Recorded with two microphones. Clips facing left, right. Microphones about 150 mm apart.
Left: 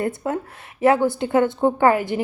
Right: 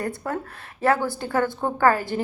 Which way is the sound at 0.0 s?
20° left (ahead or behind).